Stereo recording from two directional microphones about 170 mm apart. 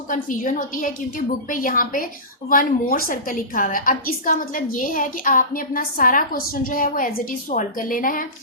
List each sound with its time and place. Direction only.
0.1 s a woman's voice: 50° left (ahead or behind)